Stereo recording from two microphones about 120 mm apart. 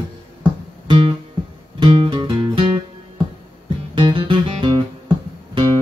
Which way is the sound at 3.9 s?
45° right (ahead or behind).